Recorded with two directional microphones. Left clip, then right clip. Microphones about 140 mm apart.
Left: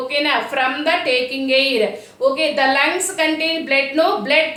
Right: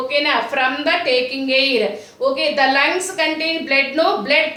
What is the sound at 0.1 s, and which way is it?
A woman's voice, 20° left (ahead or behind).